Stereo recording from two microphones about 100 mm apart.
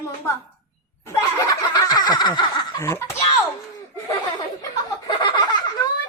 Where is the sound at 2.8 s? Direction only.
25° left (ahead or behind).